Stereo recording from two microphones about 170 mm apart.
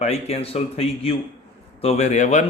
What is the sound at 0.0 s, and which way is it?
Speech, 40° left (ahead or behind).